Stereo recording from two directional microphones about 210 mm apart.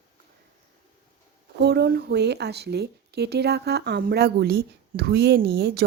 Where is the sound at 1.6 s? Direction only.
50° right (ahead or behind).